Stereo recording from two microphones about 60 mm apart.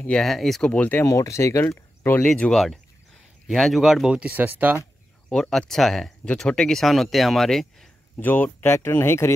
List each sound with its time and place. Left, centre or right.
0.2 s speech: centre
0.6 s speech: left
1.0 s speech: left
1.8 s a sound: left
2.5 s speech: centre
3.8 s speech: centre
4.1 s speech: right
5.3 s speech: centre
8.2 s speech: left
8.6 s speech: left